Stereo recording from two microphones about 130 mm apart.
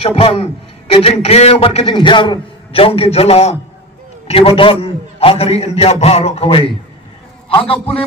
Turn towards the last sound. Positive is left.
turn(degrees=45)  # may be behind; listen again after turning